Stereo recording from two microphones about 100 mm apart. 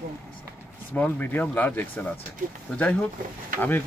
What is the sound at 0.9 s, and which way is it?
Speech, 15° left (ahead or behind).